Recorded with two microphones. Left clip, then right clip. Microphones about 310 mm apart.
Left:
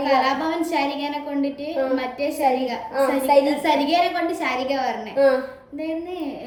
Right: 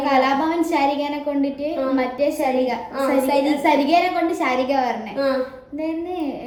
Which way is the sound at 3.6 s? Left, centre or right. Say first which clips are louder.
Right 2 dB; centre.